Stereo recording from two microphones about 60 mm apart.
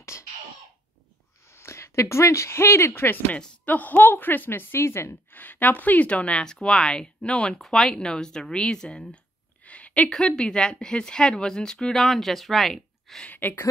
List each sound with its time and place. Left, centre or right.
0.1 s cough: left
1.5 s speech: left
3.3 s speech: left
5.4 s speech: left; by 9.2 s centre
9.7 s a sound: left
10.0 s speech: centre
13.2 s speech: left